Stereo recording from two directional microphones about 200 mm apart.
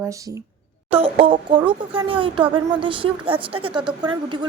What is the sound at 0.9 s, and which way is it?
A woman's voice, 30° right (ahead or behind).